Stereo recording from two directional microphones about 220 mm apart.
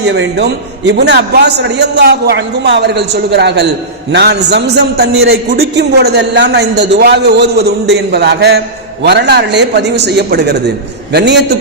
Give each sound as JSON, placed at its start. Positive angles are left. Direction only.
{"t": 0.0, "sound": "a man's voice", "side_deg": -55}